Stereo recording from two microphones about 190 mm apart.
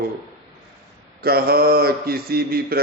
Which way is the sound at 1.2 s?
55° right (ahead or behind).